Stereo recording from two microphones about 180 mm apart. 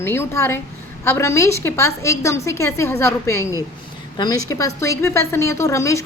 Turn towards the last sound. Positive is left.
turn(degrees=15)  # may be behind; listen again after turning